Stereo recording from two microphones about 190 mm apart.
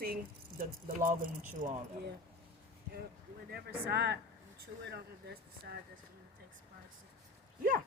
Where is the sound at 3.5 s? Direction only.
55° right (ahead or behind).